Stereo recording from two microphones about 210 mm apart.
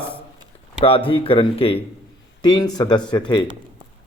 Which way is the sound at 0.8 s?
25° left (ahead or behind).